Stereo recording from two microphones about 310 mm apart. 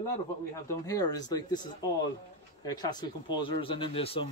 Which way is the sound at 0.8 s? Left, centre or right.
Centre.